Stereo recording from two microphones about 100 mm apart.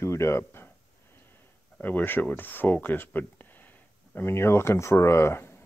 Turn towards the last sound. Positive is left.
turn(degrees=25)  # may be behind; listen again after turning